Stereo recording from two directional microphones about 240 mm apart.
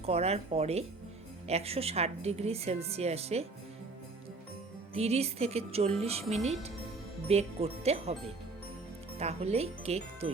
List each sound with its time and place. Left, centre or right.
0.0 s a woman's voice: right
4.9 s a woman's voice: right
7.3 s a woman's voice: right
9.1 s a woman's voice: right